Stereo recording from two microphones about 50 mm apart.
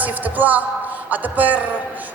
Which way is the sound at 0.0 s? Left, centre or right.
Right.